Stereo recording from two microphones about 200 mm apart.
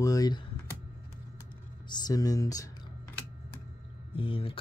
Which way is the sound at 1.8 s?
20° left (ahead or behind).